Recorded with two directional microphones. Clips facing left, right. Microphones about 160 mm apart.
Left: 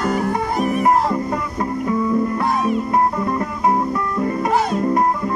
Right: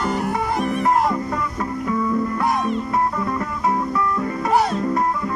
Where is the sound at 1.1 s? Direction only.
25° left (ahead or behind).